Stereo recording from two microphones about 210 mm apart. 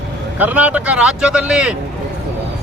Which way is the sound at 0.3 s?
10° right (ahead or behind).